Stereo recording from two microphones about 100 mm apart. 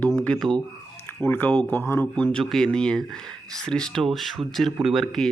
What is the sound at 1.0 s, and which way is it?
Speech, 20° left (ahead or behind).